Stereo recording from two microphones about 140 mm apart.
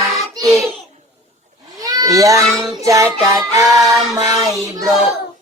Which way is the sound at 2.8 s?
25° right (ahead or behind).